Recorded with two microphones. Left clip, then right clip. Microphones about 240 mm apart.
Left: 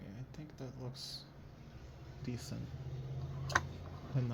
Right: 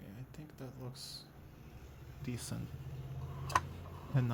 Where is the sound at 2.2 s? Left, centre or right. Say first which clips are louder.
Right 1 dB; centre.